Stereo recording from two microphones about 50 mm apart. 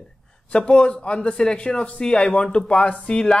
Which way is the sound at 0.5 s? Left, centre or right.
Left.